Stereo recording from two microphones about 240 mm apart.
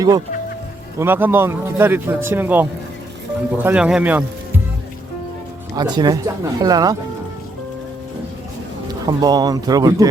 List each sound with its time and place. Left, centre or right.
0.9 s a man's voice: centre
5.7 s a man's voice: centre
9.0 s a man's voice: centre